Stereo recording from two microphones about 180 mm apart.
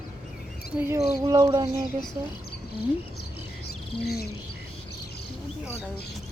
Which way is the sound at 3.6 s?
65° left (ahead or behind).